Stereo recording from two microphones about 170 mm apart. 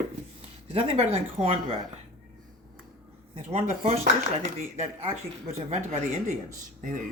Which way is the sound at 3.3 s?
40° right (ahead or behind).